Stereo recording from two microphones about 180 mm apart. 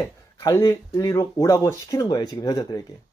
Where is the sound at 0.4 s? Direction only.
15° left (ahead or behind).